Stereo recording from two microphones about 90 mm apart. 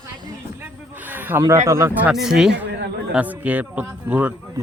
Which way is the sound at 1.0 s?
20° right (ahead or behind).